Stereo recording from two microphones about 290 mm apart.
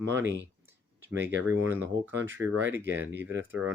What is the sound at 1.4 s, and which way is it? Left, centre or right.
Speech, centre.